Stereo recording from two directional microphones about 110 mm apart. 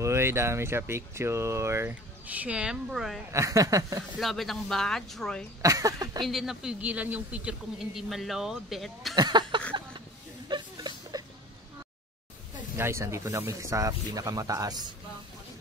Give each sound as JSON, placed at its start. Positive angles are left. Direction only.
{"t": 0.0, "sound": "speech", "side_deg": -25}
{"t": 3.3, "sound": "speech", "side_deg": -30}
{"t": 4.2, "sound": "speech", "side_deg": 0}
{"t": 5.6, "sound": "speech", "side_deg": -30}
{"t": 6.2, "sound": "speech", "side_deg": 0}
{"t": 9.1, "sound": "a sound", "side_deg": -40}
{"t": 10.5, "sound": "chuckle", "side_deg": -40}
{"t": 12.7, "sound": "speech", "side_deg": -25}